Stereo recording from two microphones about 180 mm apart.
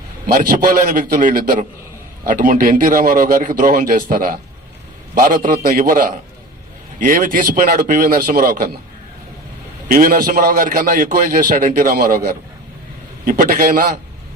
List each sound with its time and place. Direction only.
0.3 s a man's voice: 55° right (ahead or behind)
9.9 s a man's voice: 50° right (ahead or behind)